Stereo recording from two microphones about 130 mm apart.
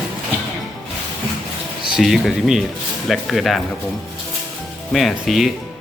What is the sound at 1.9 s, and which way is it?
Speech, centre (ahead or behind).